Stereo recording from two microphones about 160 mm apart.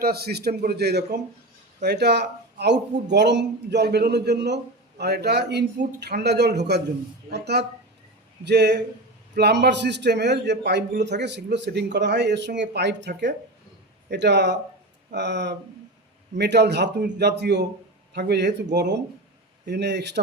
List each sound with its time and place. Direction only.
0.0 s a man's voice: 75° right (ahead or behind)